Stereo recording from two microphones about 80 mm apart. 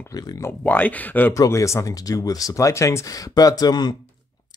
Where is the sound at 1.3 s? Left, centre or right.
Left.